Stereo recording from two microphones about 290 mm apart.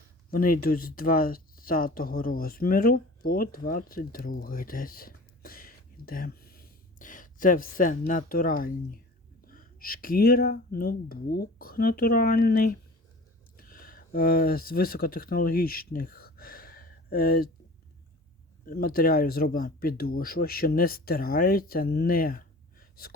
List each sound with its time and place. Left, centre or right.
0.3 s speech: left
18.6 s speech: left